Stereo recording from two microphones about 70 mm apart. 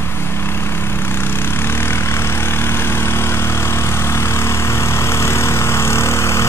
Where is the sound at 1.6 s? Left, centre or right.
Left.